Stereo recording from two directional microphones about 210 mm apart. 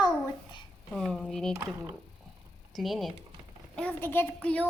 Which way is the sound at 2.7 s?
Centre (ahead or behind).